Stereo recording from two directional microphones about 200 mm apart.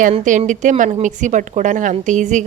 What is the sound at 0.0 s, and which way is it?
A woman's voice, 40° right (ahead or behind).